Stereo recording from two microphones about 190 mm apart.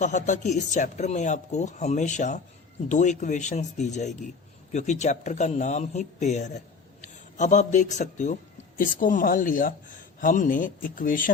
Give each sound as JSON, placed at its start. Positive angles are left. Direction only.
{"t": 0.0, "sound": "a man's voice", "side_deg": 40}